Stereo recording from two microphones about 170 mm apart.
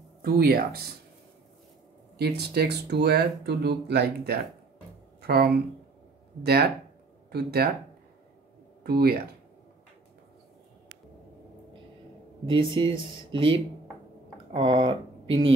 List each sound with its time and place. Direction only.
0.2 s speech: 65° right (ahead or behind)
2.1 s speech: 70° right (ahead or behind)
8.8 s speech: 65° right (ahead or behind)
12.4 s speech: 30° right (ahead or behind)